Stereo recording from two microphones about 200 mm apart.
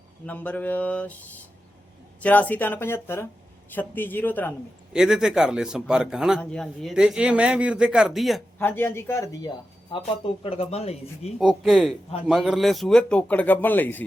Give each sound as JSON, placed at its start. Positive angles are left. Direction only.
{"t": 0.3, "sound": "speech", "side_deg": 10}
{"t": 4.9, "sound": "a man's voice", "side_deg": -5}
{"t": 8.5, "sound": "speech", "side_deg": 10}
{"t": 11.3, "sound": "a man's voice", "side_deg": 0}